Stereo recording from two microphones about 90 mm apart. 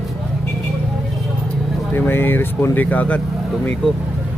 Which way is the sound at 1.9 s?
25° left (ahead or behind).